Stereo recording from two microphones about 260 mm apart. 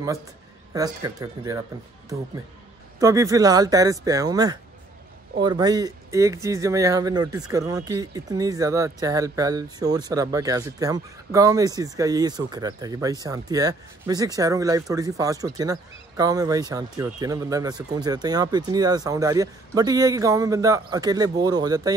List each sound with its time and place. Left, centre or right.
0.7 s speech: centre
3.0 s speech: centre